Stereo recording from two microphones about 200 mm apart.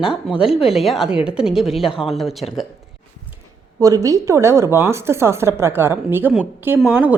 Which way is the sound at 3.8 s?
15° right (ahead or behind).